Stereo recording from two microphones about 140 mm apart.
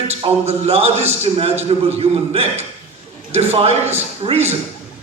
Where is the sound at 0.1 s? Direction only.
50° right (ahead or behind).